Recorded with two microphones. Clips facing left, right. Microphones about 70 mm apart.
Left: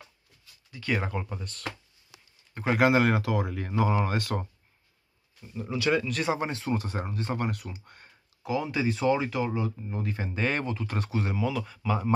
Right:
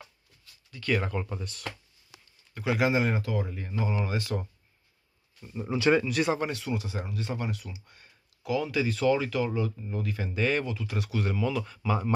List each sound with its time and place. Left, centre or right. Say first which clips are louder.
0.7 s speech: right 1 dB; centre
1.5 s speech: even; centre
2.5 s speech: left 3 dB; left
2.9 s speech: left 4 dB; left
4.0 s speech: left 2 dB; left
5.5 s speech: right 3 dB; right
6.0 s speech: right 2 dB; centre
6.3 s speech: left 1 dB; left
8.4 s speech: right 1 dB; left
11.1 s speech: right 1 dB; left
11.4 s speech: even; centre